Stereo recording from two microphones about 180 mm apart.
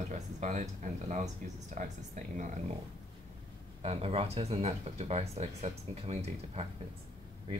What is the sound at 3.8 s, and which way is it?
Speech, 35° right (ahead or behind).